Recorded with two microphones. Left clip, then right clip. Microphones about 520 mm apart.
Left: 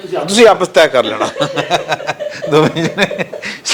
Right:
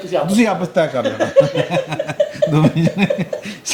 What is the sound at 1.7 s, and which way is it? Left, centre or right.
Speech, left.